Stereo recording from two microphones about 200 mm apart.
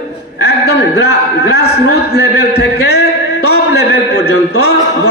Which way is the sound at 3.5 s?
55° left (ahead or behind).